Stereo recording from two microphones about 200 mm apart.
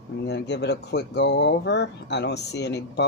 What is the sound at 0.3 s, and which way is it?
Speech, 60° left (ahead or behind).